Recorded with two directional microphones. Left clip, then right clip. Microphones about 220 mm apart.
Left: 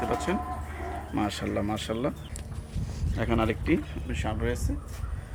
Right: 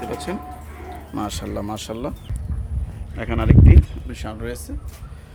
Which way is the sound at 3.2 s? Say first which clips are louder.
Right 5 dB; 5° left (ahead or behind).